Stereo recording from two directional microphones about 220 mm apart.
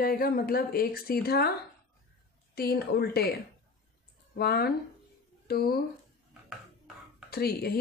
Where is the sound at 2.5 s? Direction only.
45° left (ahead or behind).